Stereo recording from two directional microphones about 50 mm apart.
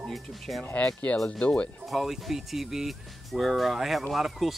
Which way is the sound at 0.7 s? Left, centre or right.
Left.